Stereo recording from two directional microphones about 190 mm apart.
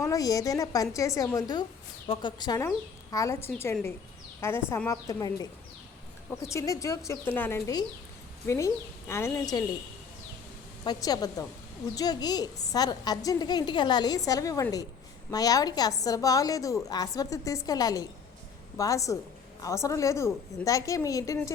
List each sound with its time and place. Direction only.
0.0 s a woman's voice: 20° left (ahead or behind)
6.5 s a woman's voice: 15° left (ahead or behind)
10.8 s a woman's voice: 20° left (ahead or behind)